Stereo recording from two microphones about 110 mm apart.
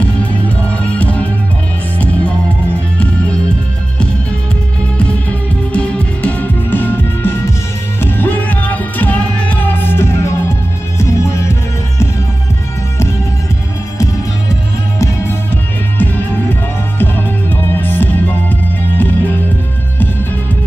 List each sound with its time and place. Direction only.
0.2 s music: 10° left (ahead or behind)
5.7 s music: 10° left (ahead or behind); by 11.5 s 25° left (ahead or behind)
17.0 s music: 20° left (ahead or behind)